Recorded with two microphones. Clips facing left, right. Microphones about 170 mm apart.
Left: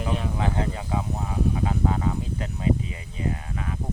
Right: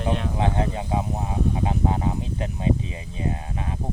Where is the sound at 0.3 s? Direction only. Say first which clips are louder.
Right 3 dB; 25° right (ahead or behind).